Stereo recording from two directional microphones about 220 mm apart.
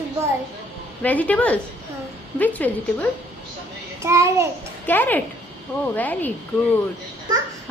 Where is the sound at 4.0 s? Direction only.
15° right (ahead or behind).